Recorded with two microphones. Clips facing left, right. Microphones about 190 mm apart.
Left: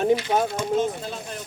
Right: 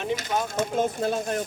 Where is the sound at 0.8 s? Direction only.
50° right (ahead or behind).